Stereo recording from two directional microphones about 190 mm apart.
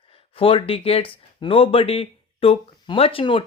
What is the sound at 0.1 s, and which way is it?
Speech, 30° left (ahead or behind).